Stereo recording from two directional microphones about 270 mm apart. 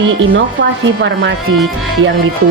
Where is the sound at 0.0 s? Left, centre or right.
Right.